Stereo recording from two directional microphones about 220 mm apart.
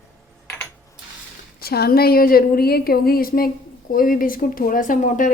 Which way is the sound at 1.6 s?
45° left (ahead or behind).